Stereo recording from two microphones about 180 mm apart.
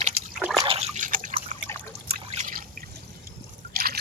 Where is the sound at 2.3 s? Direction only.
45° right (ahead or behind).